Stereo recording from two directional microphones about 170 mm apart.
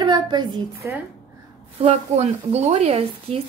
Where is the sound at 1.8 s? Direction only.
40° right (ahead or behind).